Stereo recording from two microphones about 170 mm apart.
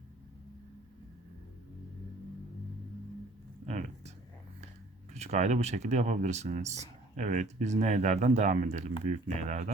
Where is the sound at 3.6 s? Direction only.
45° right (ahead or behind).